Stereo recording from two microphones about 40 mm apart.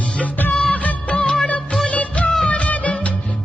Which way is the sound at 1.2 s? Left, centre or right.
Left.